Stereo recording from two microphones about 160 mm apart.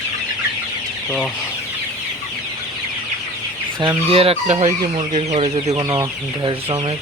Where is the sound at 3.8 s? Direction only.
35° right (ahead or behind).